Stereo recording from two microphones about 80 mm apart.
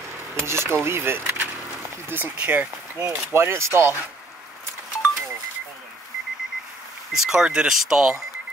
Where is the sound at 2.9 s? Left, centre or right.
Right.